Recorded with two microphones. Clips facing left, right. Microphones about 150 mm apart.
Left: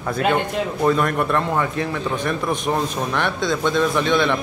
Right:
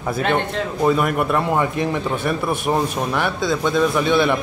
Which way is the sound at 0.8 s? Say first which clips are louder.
Right 1 dB; 5° right (ahead or behind).